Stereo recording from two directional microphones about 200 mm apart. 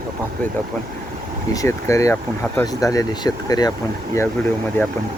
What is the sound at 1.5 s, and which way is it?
Speech, 15° left (ahead or behind).